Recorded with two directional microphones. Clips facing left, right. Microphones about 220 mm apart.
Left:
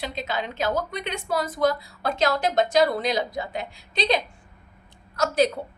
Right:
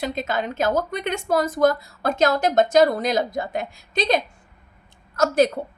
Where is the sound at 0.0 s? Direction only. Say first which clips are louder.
Right 4 dB; 50° right (ahead or behind).